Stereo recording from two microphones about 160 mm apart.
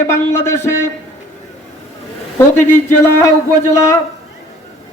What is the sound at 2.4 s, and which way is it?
Speech, 15° left (ahead or behind).